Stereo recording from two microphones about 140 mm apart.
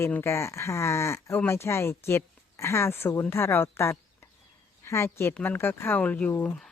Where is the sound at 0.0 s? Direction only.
20° left (ahead or behind).